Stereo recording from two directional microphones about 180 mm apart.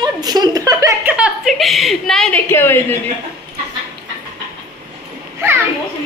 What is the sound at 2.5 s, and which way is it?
Speech, 10° left (ahead or behind).